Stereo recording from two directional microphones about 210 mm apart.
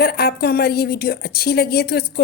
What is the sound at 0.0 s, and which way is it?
A woman's voice, 50° left (ahead or behind).